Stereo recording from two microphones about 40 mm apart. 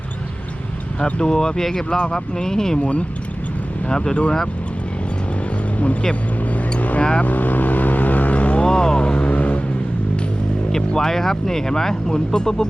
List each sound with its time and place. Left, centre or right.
0.9 s speech: left
3.8 s speech: left
6.5 s a sound: left
7.0 s speech: left
7.3 s vehicle: left
8.6 s vehicle: centre
10.7 s speech: centre